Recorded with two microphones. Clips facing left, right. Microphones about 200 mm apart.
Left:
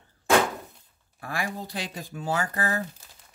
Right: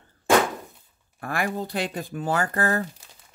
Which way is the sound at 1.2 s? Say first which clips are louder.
Right 5 dB; 55° right (ahead or behind).